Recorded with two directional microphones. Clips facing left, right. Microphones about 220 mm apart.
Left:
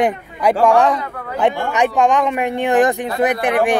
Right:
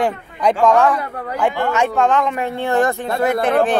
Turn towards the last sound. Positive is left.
turn(degrees=15)  # may be behind; listen again after turning